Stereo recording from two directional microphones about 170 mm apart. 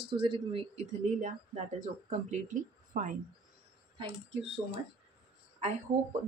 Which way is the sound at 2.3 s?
50° right (ahead or behind).